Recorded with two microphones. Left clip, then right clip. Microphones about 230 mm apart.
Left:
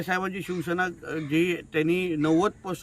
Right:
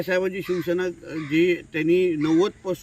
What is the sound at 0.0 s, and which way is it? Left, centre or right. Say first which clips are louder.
Speech: right 5 dB; centre.